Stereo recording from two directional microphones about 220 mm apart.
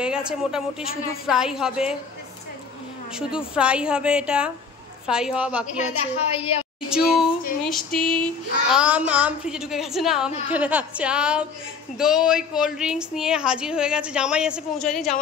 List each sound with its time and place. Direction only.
0.0 s child singing: 5° right (ahead or behind)
3.2 s child singing: 5° right (ahead or behind)
5.8 s a woman's voice: 30° left (ahead or behind)
6.9 s child singing: centre (ahead or behind)